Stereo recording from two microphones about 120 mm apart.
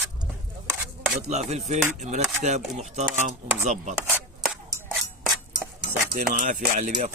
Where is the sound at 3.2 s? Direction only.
90° right.